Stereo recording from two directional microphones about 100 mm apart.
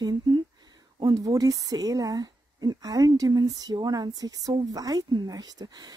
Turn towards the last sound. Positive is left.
turn(degrees=-40)  # may be behind; listen again after turning